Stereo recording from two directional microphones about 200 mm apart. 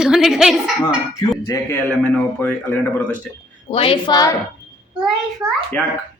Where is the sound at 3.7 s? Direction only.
25° left (ahead or behind).